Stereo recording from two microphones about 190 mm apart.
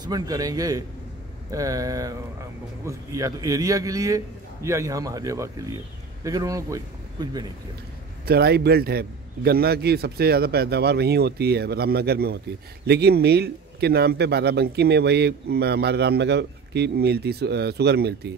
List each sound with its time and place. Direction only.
0.0 s a man's voice: 20° right (ahead or behind)
8.3 s a man's voice: 55° right (ahead or behind)